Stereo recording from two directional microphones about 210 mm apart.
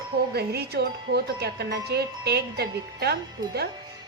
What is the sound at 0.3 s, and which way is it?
A woman's voice, 50° right (ahead or behind).